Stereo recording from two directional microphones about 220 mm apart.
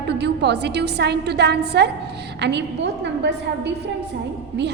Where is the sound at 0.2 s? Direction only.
50° right (ahead or behind).